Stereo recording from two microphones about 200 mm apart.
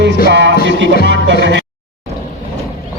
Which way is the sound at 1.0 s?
60° right (ahead or behind).